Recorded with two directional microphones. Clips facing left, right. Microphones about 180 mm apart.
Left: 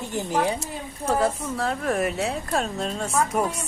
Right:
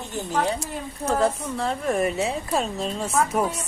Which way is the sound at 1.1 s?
5° left (ahead or behind).